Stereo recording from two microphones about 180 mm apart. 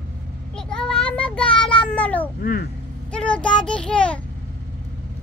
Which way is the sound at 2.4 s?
55° left (ahead or behind).